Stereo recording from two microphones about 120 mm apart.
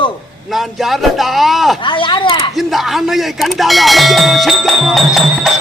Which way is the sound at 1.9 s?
40° left (ahead or behind).